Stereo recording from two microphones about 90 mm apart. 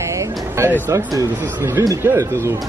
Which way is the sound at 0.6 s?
30° right (ahead or behind).